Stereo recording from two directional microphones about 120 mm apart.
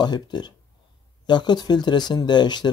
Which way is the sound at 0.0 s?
35° left (ahead or behind).